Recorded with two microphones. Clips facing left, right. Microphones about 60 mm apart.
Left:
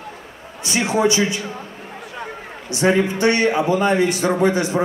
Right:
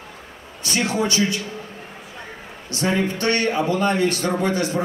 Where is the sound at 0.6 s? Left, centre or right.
Centre.